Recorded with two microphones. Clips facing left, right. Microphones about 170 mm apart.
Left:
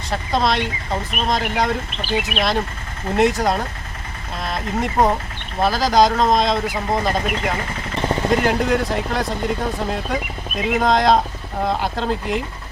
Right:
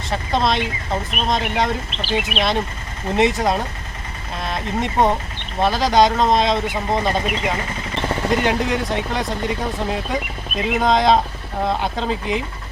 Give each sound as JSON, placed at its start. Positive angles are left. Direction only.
{"t": 0.1, "sound": "speech", "side_deg": 0}